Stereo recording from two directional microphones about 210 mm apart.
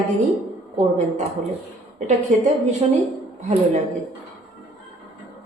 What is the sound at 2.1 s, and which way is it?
Speech, 30° right (ahead or behind).